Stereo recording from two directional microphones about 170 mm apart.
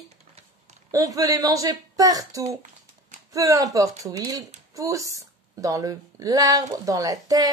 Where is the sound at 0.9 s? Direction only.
20° right (ahead or behind).